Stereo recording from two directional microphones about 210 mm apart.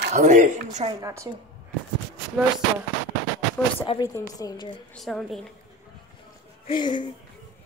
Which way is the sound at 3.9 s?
20° left (ahead or behind).